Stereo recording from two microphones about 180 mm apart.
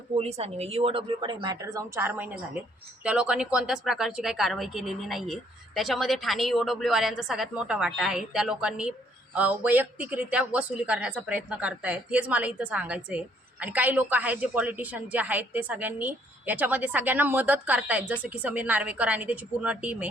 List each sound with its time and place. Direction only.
0.1 s speech: 35° right (ahead or behind); by 20.1 s 5° right (ahead or behind)